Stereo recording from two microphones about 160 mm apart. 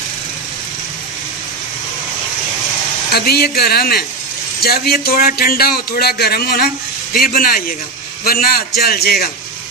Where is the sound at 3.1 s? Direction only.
75° left (ahead or behind).